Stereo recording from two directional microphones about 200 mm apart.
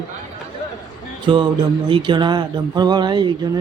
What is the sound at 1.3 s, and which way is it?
Speech, 25° right (ahead or behind).